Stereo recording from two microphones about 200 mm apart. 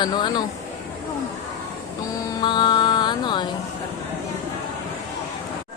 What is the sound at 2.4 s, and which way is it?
Music, 20° left (ahead or behind).